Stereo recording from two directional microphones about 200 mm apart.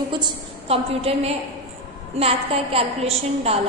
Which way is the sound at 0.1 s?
25° right (ahead or behind).